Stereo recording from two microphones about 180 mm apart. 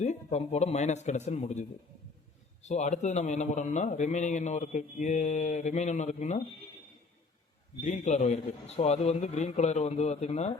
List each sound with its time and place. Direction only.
0.0 s a man's voice: 40° left (ahead or behind)
2.6 s a man's voice: 40° left (ahead or behind)
7.8 s a man's voice: 40° left (ahead or behind)